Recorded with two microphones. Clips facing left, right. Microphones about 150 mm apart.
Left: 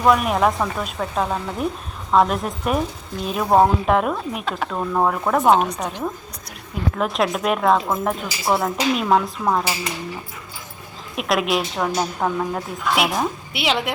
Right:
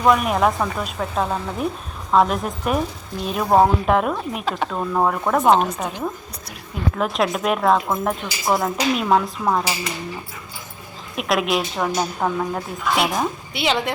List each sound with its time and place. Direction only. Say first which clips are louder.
0.0 s a woman's voice: even; centre (ahead or behind)
11.1 s a woman's voice: even; centre (ahead or behind)